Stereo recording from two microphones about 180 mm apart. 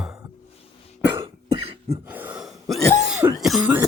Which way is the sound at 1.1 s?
30° right (ahead or behind).